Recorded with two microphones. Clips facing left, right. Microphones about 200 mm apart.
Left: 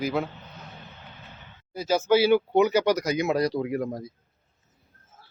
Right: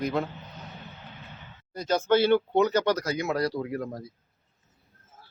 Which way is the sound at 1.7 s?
5° left (ahead or behind).